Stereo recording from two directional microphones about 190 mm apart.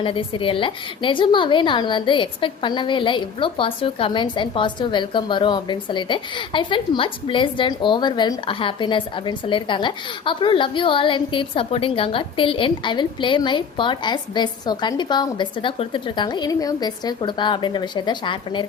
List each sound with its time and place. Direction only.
0.0 s a woman's voice: 25° left (ahead or behind)